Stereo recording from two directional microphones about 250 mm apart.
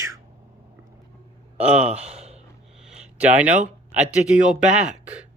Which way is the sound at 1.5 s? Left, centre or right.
Centre.